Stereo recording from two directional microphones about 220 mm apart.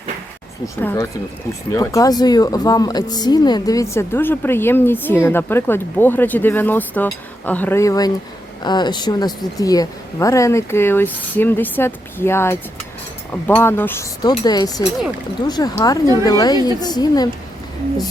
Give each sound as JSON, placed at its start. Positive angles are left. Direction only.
{"t": 0.8, "sound": "speech", "side_deg": 10}